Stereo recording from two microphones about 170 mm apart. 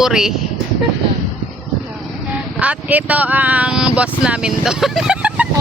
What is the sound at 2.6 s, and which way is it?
Speech, 10° right (ahead or behind).